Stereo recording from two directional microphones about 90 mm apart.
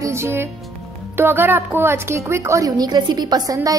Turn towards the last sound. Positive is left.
turn(degrees=-50)  # may be behind; listen again after turning